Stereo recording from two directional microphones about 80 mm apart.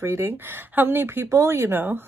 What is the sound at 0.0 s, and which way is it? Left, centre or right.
Speech, right.